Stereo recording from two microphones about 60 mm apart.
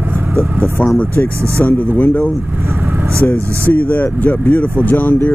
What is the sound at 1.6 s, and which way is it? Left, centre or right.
Speech, left.